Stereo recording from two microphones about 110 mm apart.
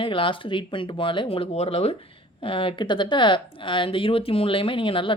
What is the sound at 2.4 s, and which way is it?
Speech, 55° left (ahead or behind).